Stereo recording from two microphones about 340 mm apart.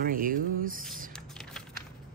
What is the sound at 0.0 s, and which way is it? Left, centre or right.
Speech, right.